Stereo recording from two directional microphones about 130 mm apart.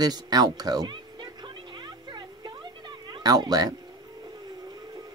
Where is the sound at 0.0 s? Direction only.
30° right (ahead or behind).